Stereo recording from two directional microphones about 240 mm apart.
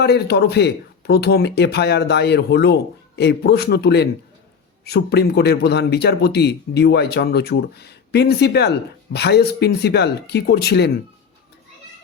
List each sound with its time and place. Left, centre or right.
0.0 s speech: left